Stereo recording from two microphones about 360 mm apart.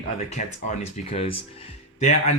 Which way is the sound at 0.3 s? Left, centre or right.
Centre.